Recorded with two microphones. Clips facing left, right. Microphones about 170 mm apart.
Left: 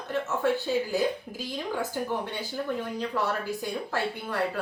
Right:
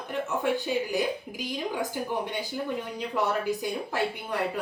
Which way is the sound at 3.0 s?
15° right (ahead or behind).